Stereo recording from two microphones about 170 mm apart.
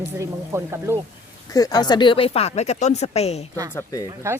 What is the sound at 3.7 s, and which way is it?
Speech, 20° left (ahead or behind).